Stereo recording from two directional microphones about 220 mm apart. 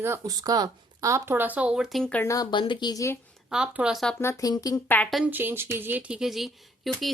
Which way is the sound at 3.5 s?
5° right (ahead or behind).